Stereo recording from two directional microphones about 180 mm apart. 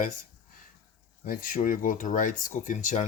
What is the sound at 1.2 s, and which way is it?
Speech, 50° left (ahead or behind).